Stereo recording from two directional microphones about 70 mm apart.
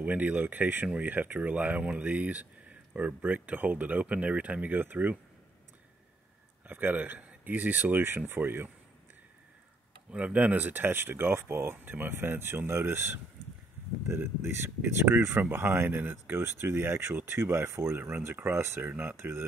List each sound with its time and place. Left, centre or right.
0.0 s speech: right
6.7 s speech: right
10.1 s speech: centre